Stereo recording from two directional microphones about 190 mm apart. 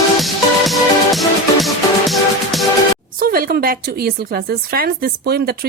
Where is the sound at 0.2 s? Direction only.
Centre (ahead or behind).